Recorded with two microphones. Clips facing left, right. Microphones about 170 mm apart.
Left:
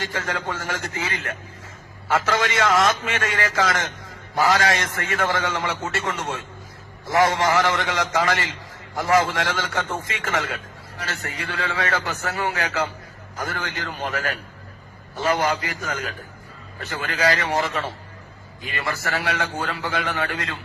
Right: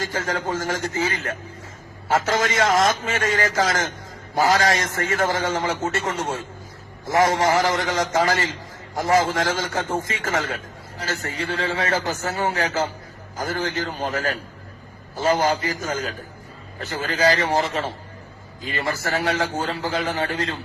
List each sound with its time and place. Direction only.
0.0 s a man's voice: 40° right (ahead or behind)